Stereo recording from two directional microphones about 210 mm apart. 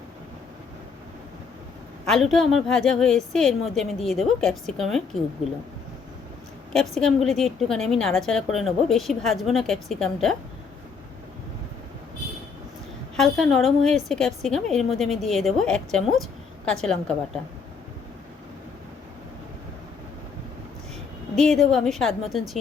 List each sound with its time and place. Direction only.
2.0 s a woman's voice: centre (ahead or behind)
6.9 s a woman's voice: centre (ahead or behind)
13.1 s a woman's voice: centre (ahead or behind)
21.5 s a woman's voice: centre (ahead or behind)